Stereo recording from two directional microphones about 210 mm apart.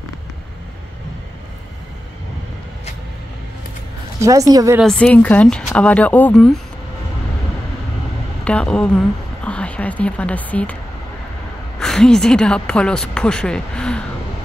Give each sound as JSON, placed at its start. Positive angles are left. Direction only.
{"t": 4.2, "sound": "a woman's voice", "side_deg": -15}
{"t": 4.7, "sound": "speech", "side_deg": 5}
{"t": 8.5, "sound": "speech", "side_deg": 5}
{"t": 11.8, "sound": "speech", "side_deg": 0}